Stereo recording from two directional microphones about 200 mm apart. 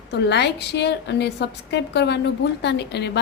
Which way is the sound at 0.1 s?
60° left (ahead or behind).